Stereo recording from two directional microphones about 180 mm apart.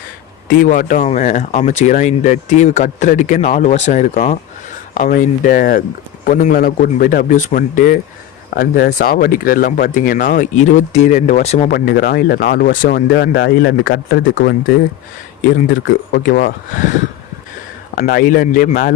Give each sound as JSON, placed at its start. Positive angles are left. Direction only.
{"t": 0.4, "sound": "speech", "side_deg": 50}
{"t": 11.7, "sound": "speech", "side_deg": 60}
{"t": 13.9, "sound": "speech", "side_deg": 55}
{"t": 16.3, "sound": "speech", "side_deg": 50}
{"t": 17.9, "sound": "speech", "side_deg": 55}